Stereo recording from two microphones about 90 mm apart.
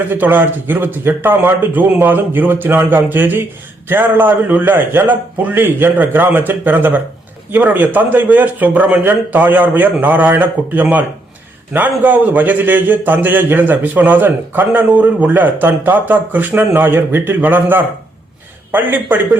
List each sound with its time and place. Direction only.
0.1 s a man's voice: 20° right (ahead or behind)